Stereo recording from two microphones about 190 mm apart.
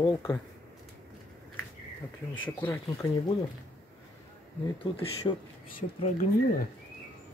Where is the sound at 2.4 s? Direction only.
10° left (ahead or behind).